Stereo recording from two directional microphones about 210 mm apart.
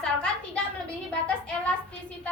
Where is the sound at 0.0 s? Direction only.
5° left (ahead or behind).